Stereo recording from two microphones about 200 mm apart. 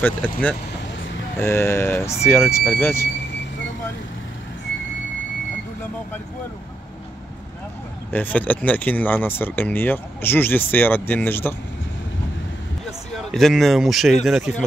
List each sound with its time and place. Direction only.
0.0 s speech: 10° left (ahead or behind)
8.1 s speech: 10° left (ahead or behind)
13.1 s speech: centre (ahead or behind)